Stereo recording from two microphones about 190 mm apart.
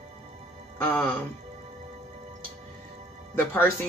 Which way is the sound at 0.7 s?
10° left (ahead or behind).